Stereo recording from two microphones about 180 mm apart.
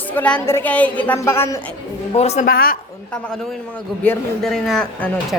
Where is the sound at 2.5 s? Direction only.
55° left (ahead or behind).